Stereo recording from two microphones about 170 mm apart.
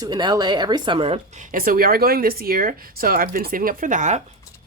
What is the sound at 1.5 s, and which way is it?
Speech, 55° right (ahead or behind).